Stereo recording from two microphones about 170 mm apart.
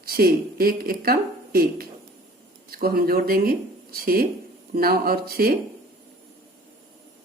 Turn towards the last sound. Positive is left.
turn(degrees=-60)  # may be behind; listen again after turning